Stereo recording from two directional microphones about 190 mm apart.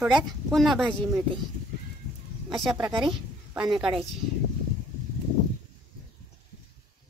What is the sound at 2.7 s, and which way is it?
Speech, 25° right (ahead or behind).